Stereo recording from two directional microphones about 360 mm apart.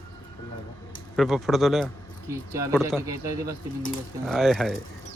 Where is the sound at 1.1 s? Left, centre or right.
Centre.